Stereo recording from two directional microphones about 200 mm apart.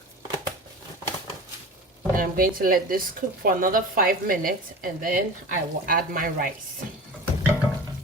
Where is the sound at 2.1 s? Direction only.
45° right (ahead or behind).